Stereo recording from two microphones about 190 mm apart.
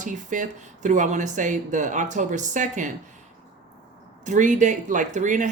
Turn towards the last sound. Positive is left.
turn(degrees=-40)  # may be behind; listen again after turning